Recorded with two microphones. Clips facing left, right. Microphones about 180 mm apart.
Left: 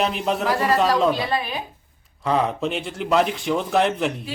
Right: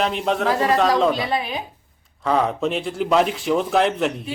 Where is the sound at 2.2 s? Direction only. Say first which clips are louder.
Right 1 dB; centre (ahead or behind).